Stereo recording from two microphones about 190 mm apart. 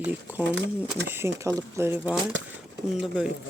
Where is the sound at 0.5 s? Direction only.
70° right (ahead or behind).